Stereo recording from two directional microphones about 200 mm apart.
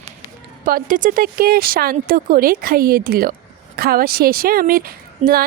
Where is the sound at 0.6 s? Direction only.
45° right (ahead or behind).